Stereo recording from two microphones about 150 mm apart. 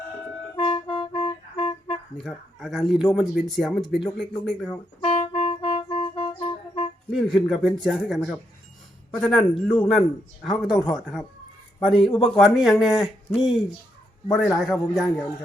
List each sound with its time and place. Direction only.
0.5 s music: 40° left (ahead or behind)
2.1 s a man's voice: centre (ahead or behind)
4.9 s music: 40° left (ahead or behind)
7.1 s a man's voice: centre (ahead or behind)